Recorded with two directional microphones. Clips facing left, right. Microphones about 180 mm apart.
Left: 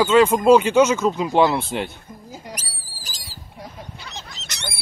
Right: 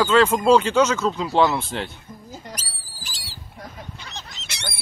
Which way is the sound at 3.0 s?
40° left (ahead or behind).